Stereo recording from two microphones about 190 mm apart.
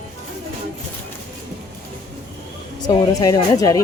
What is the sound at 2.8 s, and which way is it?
Speech, 20° left (ahead or behind).